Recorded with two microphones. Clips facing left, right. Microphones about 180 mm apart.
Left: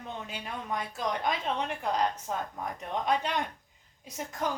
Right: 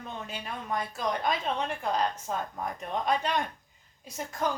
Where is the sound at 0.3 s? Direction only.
15° left (ahead or behind).